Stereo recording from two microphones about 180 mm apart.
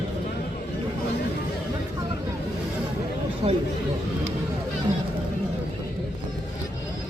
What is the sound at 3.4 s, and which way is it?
Chatter, 25° right (ahead or behind).